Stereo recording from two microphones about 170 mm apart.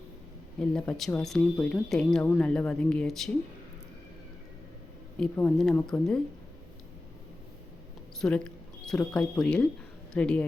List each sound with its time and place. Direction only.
0.7 s speech: 5° left (ahead or behind)
5.2 s speech: 5° left (ahead or behind)
8.2 s speech: 5° left (ahead or behind)